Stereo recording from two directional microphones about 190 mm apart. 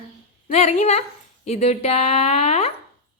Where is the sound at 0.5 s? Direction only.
35° left (ahead or behind).